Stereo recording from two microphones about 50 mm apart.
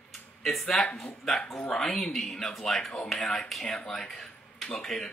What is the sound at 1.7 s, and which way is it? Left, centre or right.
A man's voice, centre.